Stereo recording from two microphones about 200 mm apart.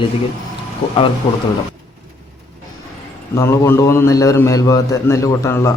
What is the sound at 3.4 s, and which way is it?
A man's voice, 10° left (ahead or behind).